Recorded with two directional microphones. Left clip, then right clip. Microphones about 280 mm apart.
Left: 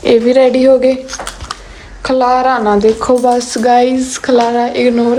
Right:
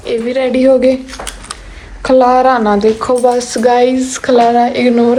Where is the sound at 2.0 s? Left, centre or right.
Centre.